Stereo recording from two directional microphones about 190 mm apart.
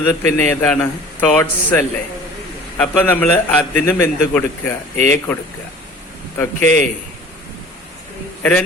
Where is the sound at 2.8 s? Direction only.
10° left (ahead or behind).